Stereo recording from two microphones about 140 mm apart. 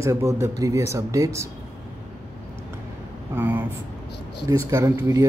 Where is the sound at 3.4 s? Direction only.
15° right (ahead or behind).